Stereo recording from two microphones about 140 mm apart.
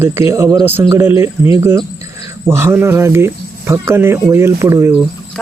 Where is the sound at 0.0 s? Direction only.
15° right (ahead or behind).